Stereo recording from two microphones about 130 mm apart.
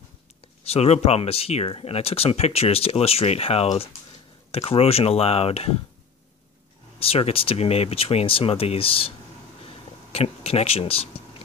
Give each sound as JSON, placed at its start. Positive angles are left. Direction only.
{"t": 0.7, "sound": "speech", "side_deg": 55}
{"t": 7.0, "sound": "speech", "side_deg": 50}
{"t": 10.1, "sound": "speech", "side_deg": 50}